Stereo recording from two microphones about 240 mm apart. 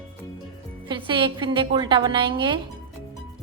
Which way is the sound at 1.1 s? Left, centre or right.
Centre.